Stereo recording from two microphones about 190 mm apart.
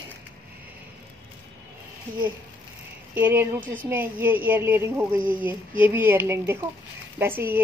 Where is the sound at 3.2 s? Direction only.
10° right (ahead or behind).